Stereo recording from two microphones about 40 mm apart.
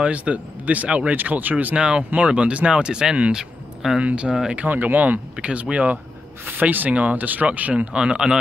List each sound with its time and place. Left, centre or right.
0.0 s speech: right
1.8 s speech: right
4.6 s speech: right
5.4 s speech: right
6.4 s speech: right
7.4 s speech: right